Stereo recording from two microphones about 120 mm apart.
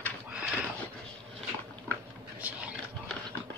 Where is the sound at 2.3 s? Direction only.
15° right (ahead or behind).